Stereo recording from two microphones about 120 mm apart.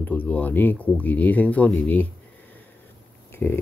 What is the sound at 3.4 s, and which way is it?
Speech, 15° left (ahead or behind).